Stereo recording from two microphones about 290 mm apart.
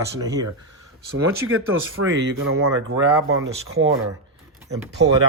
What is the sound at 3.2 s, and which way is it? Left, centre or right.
Speech, right.